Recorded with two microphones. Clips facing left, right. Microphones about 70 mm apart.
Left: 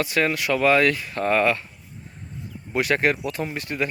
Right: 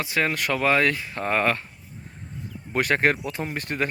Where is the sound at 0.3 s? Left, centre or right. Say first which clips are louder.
Left 4 dB; right.